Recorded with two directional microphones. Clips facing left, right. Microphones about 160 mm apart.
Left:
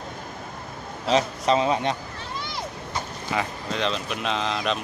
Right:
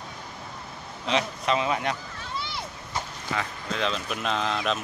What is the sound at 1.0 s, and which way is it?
Speech, 40° left (ahead or behind).